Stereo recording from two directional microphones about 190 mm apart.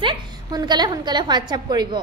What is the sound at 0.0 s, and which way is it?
A woman's voice, 25° right (ahead or behind).